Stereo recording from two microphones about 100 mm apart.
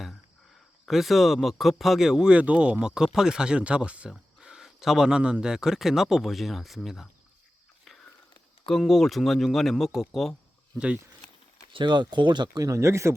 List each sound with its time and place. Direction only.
0.9 s speech: centre (ahead or behind)
7.9 s a sound: centre (ahead or behind)
8.6 s speech: centre (ahead or behind)
11.7 s speech: 50° right (ahead or behind); by 13.1 s 30° right (ahead or behind)